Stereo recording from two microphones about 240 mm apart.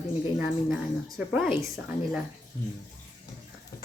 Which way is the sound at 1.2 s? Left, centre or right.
Centre.